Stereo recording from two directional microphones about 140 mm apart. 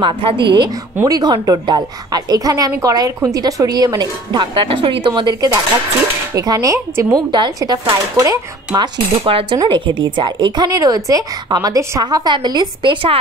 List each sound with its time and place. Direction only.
0.0 s a woman's voice: 35° right (ahead or behind)
6.3 s a woman's voice: 25° right (ahead or behind)
9.2 s speech: 40° right (ahead or behind)